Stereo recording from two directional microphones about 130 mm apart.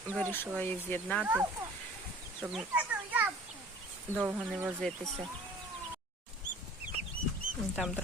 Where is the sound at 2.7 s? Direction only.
10° right (ahead or behind).